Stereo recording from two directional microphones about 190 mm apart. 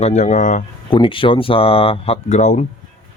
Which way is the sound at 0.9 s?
25° left (ahead or behind).